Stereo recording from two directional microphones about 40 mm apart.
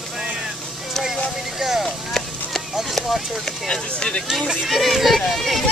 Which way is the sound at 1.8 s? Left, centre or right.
Centre.